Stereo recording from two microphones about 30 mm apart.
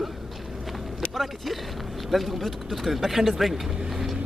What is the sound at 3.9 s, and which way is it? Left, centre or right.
Vehicle, centre.